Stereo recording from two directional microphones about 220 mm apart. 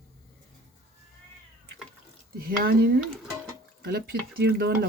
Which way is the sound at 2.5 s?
45° right (ahead or behind).